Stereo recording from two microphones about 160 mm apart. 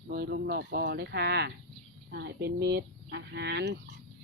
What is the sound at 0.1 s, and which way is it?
Speech, 85° right.